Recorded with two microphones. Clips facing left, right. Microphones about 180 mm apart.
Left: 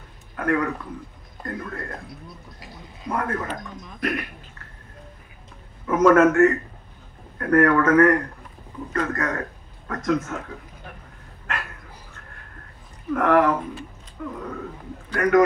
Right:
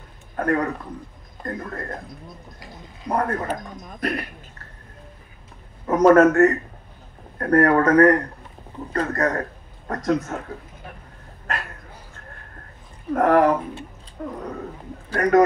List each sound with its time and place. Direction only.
0.4 s a man's voice: 35° right (ahead or behind)
1.4 s speech: 45° right (ahead or behind)
5.9 s speech: 35° right (ahead or behind)
11.5 s speech: 35° right (ahead or behind)
13.1 s speech: 35° right (ahead or behind)